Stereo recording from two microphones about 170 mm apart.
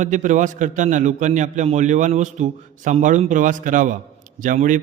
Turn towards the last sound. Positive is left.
turn(degrees=-50)  # may be behind; listen again after turning